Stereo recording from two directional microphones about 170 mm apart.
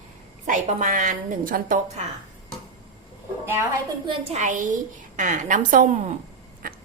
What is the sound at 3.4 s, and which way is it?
Speech, 15° right (ahead or behind).